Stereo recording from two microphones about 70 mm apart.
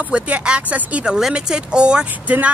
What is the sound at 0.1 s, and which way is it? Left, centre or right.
Speech, centre.